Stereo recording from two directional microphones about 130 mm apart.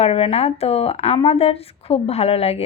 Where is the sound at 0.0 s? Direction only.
50° left (ahead or behind).